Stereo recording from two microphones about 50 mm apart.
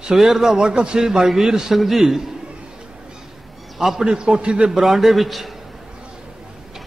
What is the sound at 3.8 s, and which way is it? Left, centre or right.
Speech, centre.